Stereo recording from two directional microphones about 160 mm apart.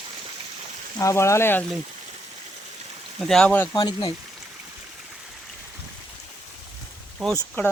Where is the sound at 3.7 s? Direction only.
30° left (ahead or behind).